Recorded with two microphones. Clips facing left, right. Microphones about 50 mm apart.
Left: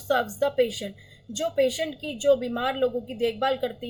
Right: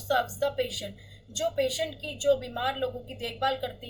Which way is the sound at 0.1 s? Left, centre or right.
Left.